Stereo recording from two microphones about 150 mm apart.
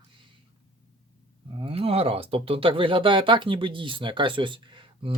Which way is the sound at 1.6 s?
40° right (ahead or behind).